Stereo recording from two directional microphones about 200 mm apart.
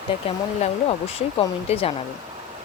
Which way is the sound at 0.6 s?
30° left (ahead or behind).